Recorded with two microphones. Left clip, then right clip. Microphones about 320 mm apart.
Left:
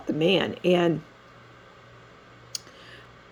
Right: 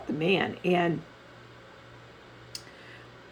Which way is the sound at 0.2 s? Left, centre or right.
Left.